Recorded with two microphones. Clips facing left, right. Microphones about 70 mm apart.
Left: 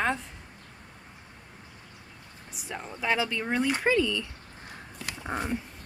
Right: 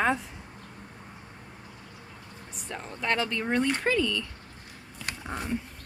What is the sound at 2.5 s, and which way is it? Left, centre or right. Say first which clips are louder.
Speech: left 1 dB; centre.